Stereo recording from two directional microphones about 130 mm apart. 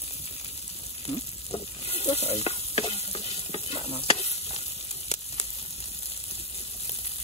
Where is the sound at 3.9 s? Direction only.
50° left (ahead or behind).